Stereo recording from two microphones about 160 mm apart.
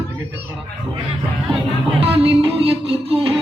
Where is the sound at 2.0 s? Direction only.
35° right (ahead or behind).